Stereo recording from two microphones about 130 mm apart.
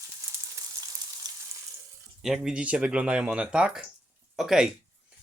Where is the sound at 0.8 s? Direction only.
35° right (ahead or behind).